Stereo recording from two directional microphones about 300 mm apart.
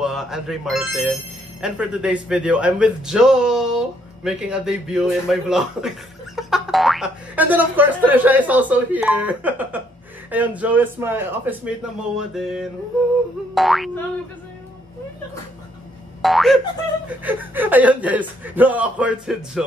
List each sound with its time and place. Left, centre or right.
0.0 s speech: centre
16.2 s boing: centre
17.2 s speech: centre